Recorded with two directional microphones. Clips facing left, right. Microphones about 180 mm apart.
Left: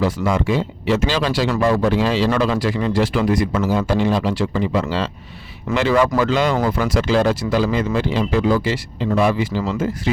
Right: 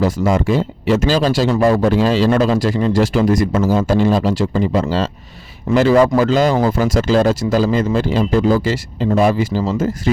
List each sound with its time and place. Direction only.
0.0 s speech: 45° right (ahead or behind)